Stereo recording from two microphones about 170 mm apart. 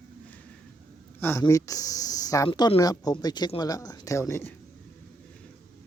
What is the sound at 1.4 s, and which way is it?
Speech, 20° left (ahead or behind).